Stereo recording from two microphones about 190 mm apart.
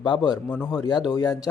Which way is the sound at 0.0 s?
25° left (ahead or behind).